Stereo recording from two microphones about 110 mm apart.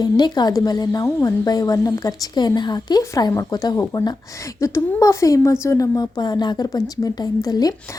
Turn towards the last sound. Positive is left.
turn(degrees=35)  # may be behind; listen again after turning